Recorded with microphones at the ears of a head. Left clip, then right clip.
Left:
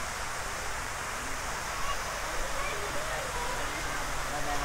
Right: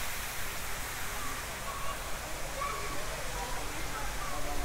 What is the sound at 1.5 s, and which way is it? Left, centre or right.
Waterfall, left.